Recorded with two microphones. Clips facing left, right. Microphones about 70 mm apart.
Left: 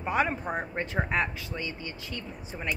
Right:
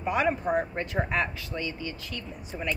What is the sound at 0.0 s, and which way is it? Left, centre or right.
Speech, left.